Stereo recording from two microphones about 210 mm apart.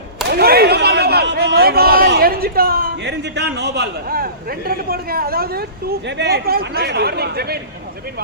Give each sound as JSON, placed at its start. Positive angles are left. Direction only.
{"t": 0.3, "sound": "speech", "side_deg": -50}